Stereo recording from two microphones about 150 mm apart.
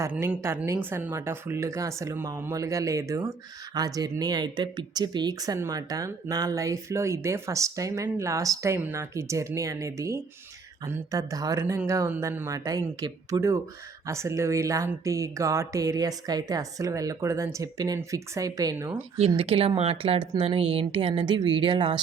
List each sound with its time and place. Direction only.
0.2 s speech: 15° right (ahead or behind)
19.4 s speech: 40° right (ahead or behind)